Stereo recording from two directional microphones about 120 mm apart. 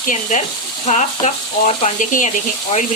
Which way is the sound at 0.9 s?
75° left (ahead or behind).